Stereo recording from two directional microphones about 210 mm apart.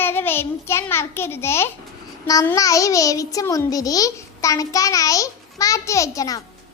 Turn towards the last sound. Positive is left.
turn(degrees=15)  # may be behind; listen again after turning